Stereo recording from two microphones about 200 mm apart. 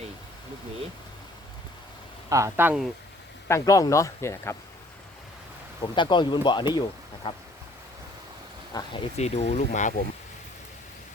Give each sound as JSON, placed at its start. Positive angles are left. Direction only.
{"t": 2.3, "sound": "speech", "side_deg": -15}
{"t": 3.5, "sound": "speech", "side_deg": 15}
{"t": 5.8, "sound": "speech", "side_deg": 25}
{"t": 8.7, "sound": "speech", "side_deg": 30}